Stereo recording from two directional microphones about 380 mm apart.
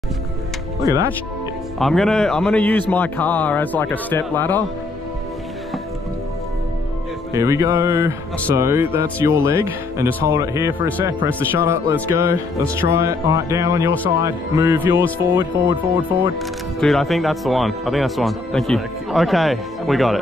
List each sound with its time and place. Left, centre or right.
0.7 s speech: centre
7.3 s speech: centre